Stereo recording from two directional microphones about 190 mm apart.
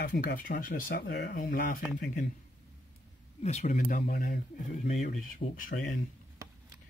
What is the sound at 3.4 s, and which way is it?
Speech, 35° left (ahead or behind).